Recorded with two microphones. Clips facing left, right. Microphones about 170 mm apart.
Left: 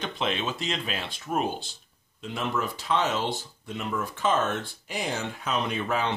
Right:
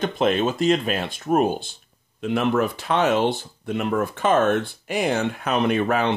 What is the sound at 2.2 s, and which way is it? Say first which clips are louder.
Speech: right 9 dB; 65° right (ahead or behind).